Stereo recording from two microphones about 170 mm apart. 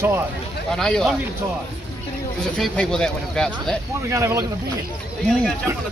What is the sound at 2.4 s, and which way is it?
Speech, 5° left (ahead or behind).